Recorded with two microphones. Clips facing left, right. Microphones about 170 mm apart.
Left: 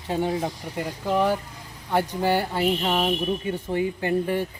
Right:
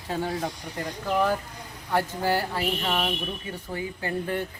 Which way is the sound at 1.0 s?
20° left (ahead or behind).